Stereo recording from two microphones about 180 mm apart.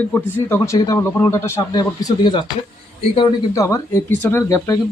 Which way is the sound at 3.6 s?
15° left (ahead or behind).